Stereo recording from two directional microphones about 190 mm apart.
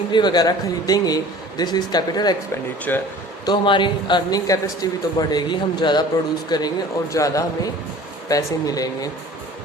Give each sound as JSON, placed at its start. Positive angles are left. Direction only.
{"t": 0.1, "sound": "a man's voice", "side_deg": 20}
{"t": 2.9, "sound": "speech", "side_deg": 10}
{"t": 3.4, "sound": "a man's voice", "side_deg": 25}